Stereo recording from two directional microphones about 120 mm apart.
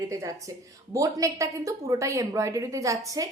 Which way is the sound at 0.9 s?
25° right (ahead or behind).